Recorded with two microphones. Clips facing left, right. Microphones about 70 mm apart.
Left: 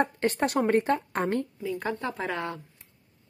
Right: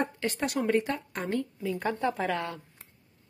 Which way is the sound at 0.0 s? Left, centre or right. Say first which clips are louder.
Left 5 dB; left.